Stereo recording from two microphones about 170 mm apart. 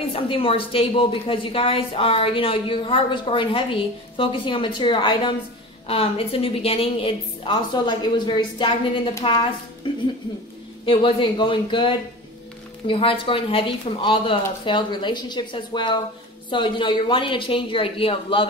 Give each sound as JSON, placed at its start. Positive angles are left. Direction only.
{"t": 0.1, "sound": "a woman's voice", "side_deg": 30}
{"t": 10.9, "sound": "a woman's voice", "side_deg": 30}